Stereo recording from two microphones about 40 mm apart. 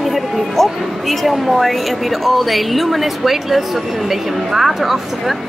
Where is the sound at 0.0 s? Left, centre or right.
Centre.